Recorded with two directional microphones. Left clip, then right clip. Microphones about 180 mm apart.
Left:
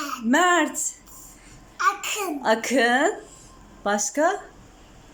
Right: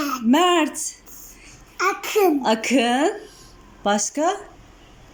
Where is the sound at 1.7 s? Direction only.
35° right (ahead or behind).